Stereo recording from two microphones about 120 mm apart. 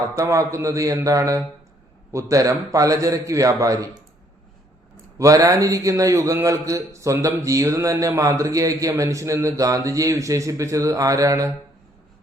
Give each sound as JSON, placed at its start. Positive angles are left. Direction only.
{"t": 0.1, "sound": "a man's voice", "side_deg": -25}
{"t": 5.1, "sound": "a man's voice", "side_deg": -25}